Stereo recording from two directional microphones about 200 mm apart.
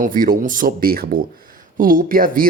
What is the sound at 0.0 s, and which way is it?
Speech, 45° right (ahead or behind).